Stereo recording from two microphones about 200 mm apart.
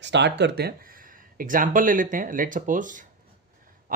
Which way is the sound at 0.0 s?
60° right (ahead or behind).